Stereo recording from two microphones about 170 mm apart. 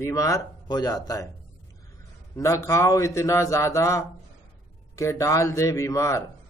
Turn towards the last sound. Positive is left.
turn(degrees=20)  # may be behind; listen again after turning